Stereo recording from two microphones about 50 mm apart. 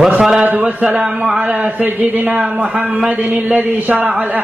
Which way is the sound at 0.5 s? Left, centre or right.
Right.